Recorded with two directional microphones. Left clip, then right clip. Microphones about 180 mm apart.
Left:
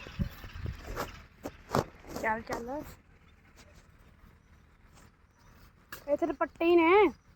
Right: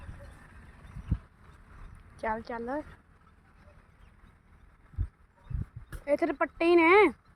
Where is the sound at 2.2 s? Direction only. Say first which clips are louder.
Even; 15° right (ahead or behind).